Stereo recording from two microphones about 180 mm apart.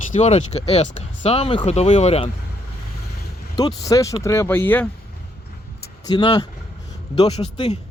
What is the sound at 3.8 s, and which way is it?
Speech, 20° left (ahead or behind).